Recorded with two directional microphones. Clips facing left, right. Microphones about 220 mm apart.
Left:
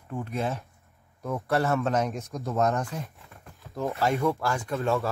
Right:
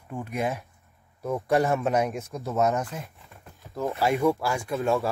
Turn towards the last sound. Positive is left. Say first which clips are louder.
# right 2 dB
turn(degrees=-10)  # may be behind; listen again after turning